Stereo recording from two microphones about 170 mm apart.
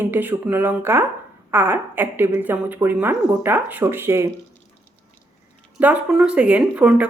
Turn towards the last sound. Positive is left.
turn(degrees=-5)  # may be behind; listen again after turning